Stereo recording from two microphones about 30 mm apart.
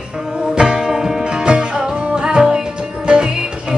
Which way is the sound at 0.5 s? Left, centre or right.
Right.